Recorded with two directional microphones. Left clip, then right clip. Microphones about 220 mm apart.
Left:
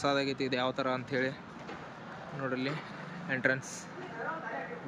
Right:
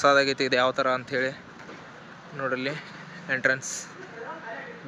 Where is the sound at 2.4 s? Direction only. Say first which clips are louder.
Right 7 dB; 5° left (ahead or behind).